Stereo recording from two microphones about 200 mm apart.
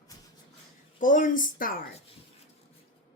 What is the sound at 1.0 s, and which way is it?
Speech, 40° left (ahead or behind).